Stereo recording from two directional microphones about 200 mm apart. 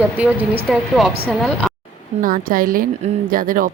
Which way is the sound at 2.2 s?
45° right (ahead or behind).